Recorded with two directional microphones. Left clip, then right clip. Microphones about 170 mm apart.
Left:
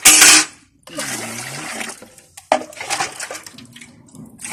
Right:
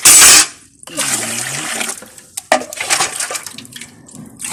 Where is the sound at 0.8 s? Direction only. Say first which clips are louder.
Right 6 dB; centre (ahead or behind).